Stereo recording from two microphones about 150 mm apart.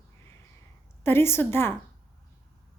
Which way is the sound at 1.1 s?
15° left (ahead or behind).